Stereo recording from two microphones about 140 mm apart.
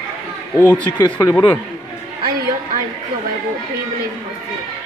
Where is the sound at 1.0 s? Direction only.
25° left (ahead or behind).